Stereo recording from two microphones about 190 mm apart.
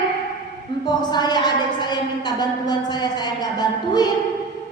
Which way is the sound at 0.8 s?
20° left (ahead or behind).